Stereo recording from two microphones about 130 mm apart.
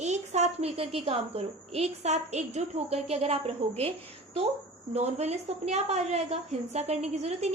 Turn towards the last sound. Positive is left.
turn(degrees=-55)  # may be behind; listen again after turning